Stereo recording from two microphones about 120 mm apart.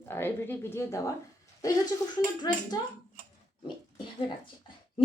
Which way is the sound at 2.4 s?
35° left (ahead or behind).